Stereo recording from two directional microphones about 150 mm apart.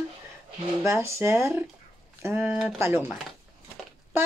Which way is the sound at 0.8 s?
20° right (ahead or behind).